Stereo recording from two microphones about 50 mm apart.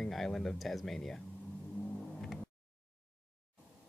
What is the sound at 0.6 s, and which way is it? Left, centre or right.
Speech, centre.